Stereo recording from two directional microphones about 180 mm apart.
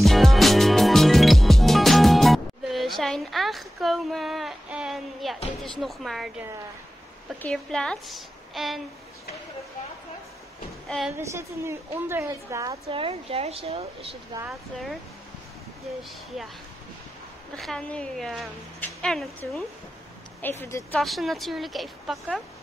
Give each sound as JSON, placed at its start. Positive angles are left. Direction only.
{"t": 0.0, "sound": "music", "side_deg": 0}
{"t": 5.6, "sound": "a woman's voice", "side_deg": 0}
{"t": 7.4, "sound": "a woman's voice", "side_deg": 5}
{"t": 10.9, "sound": "a woman's voice", "side_deg": 0}
{"t": 11.1, "sound": "a woman's voice", "side_deg": -15}
{"t": 12.9, "sound": "speech", "side_deg": -30}
{"t": 14.5, "sound": "a woman's voice", "side_deg": 0}
{"t": 16.3, "sound": "a woman's voice", "side_deg": 0}
{"t": 17.6, "sound": "a woman's voice", "side_deg": 5}